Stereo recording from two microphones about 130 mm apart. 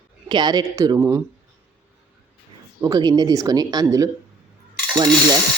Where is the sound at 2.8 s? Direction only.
30° right (ahead or behind).